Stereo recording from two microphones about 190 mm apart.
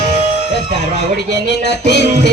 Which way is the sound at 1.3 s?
65° left (ahead or behind).